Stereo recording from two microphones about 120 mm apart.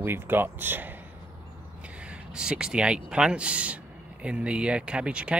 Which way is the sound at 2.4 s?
5° right (ahead or behind).